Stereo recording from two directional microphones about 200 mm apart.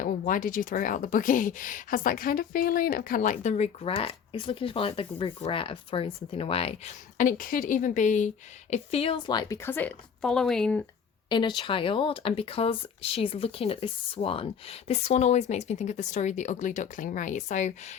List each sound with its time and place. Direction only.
0.0 s a woman's voice: 40° left (ahead or behind); by 10.8 s 5° left (ahead or behind)
11.3 s speech: 25° left (ahead or behind)